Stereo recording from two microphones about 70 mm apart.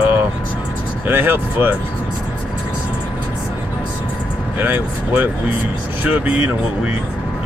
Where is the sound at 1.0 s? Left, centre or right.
Right.